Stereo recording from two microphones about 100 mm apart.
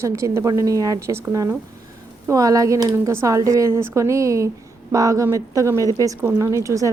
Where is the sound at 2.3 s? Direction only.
35° right (ahead or behind).